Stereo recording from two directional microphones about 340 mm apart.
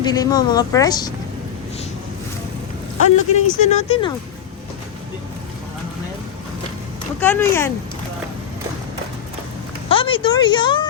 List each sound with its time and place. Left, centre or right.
0.0 s speech: centre
3.3 s speech: centre
7.2 s speech: centre
9.9 s speech: centre